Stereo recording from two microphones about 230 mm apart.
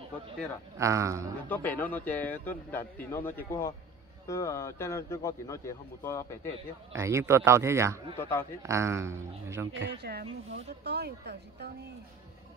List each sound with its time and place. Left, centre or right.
0.7 s a man's voice: centre
1.5 s a man's voice: centre
6.9 s a man's voice: centre
8.2 s a man's voice: centre
8.6 s a man's voice: centre
9.8 s a woman's voice: right